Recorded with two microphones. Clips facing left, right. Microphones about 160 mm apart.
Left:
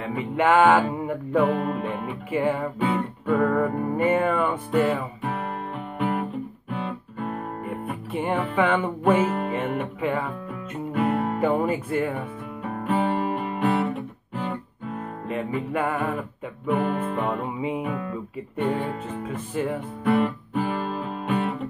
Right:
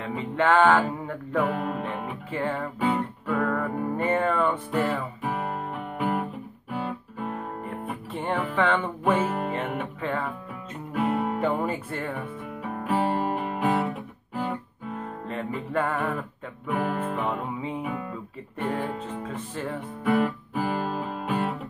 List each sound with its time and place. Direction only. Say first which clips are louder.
0.0 s music: left 2 dB; 10° left (ahead or behind)
2.3 s music: left 5 dB; 10° left (ahead or behind)
2.8 s music: left 1 dB; centre (ahead or behind)
5.9 s guitar: left 1 dB; centre (ahead or behind)
6.7 s music: right 1 dB; centre (ahead or behind)
9.0 s speech: left 4 dB; centre (ahead or behind)
10.9 s music: left 2 dB; 5° right (ahead or behind)
12.8 s music: left 1 dB; centre (ahead or behind)
15.2 s music: left 5 dB; 10° left (ahead or behind)
16.6 s speech: left 3 dB; centre (ahead or behind)
17.6 s music: left 4 dB; 10° left (ahead or behind)
19.1 s music: left 5 dB; 5° left (ahead or behind)